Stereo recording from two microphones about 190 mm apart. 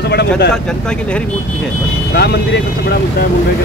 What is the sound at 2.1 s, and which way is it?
Speech, 60° left (ahead or behind).